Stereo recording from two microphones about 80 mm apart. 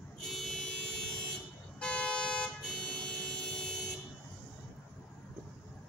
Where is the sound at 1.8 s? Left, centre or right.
Centre.